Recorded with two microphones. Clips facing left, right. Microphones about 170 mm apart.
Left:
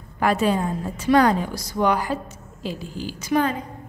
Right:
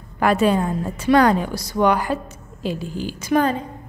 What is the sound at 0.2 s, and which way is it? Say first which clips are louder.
A woman's voice: right 3 dB; 65° right (ahead or behind).